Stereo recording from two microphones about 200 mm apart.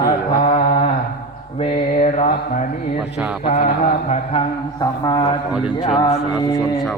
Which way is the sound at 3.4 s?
35° left (ahead or behind).